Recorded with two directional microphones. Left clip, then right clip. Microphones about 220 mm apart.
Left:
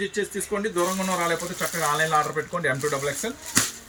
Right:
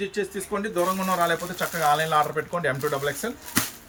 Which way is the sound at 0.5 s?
15° right (ahead or behind).